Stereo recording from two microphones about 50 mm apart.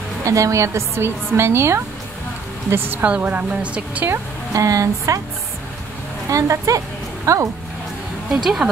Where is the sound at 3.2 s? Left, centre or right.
Right.